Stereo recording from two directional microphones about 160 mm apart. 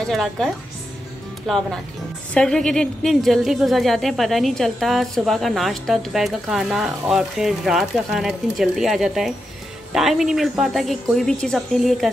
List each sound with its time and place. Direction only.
0.0 s a woman's voice: centre (ahead or behind)